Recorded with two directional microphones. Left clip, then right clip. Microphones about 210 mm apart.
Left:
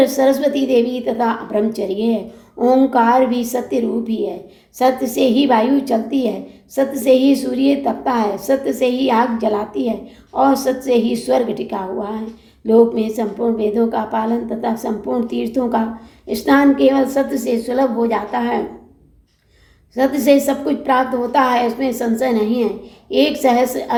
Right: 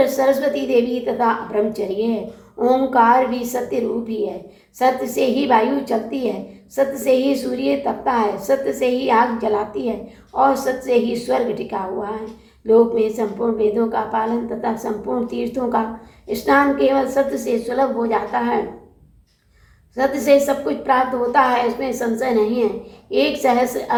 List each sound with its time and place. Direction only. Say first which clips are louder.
0.0 s a woman's voice: left 2 dB; 40° left (ahead or behind)
20.0 s a woman's voice: left 1 dB; 40° left (ahead or behind)